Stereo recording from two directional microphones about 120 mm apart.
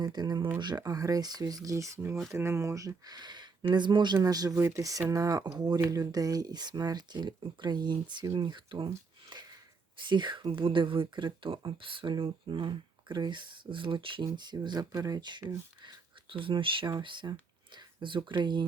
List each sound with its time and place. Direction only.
0.0 s speech: 35° right (ahead or behind)
4.5 s speech: 20° right (ahead or behind); by 8.9 s 40° right (ahead or behind)
9.3 s a sound: 40° right (ahead or behind)
10.0 s speech: 40° right (ahead or behind)